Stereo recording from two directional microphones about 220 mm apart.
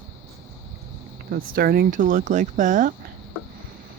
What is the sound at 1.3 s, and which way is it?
Speech, 45° right (ahead or behind).